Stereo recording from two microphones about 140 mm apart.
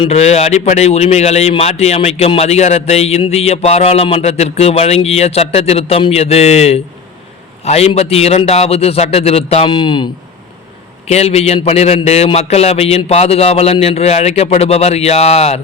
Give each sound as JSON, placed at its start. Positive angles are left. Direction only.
{"t": 0.0, "sound": "a man's voice", "side_deg": 50}
{"t": 11.0, "sound": "a man's voice", "side_deg": 50}